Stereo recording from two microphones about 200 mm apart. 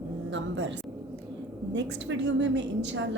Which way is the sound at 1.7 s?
60° right (ahead or behind).